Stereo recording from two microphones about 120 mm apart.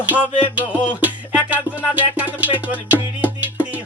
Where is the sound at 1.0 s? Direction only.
15° right (ahead or behind).